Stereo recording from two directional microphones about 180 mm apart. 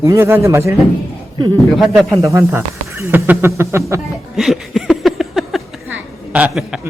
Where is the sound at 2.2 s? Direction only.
15° right (ahead or behind).